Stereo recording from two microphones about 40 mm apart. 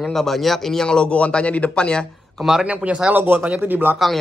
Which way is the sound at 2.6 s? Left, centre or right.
Right.